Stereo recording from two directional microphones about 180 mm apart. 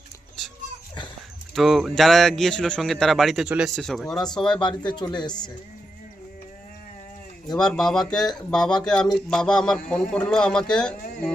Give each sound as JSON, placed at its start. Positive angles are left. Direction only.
{"t": 1.5, "sound": "speech", "side_deg": 0}
{"t": 4.6, "sound": "speech", "side_deg": 25}
{"t": 7.5, "sound": "speech", "side_deg": 5}